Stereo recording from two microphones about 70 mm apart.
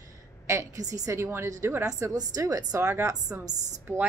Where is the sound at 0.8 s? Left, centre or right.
Right.